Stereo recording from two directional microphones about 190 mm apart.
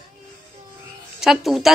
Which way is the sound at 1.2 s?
Centre (ahead or behind).